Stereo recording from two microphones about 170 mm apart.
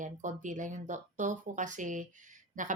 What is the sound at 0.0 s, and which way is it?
Speech, 45° right (ahead or behind).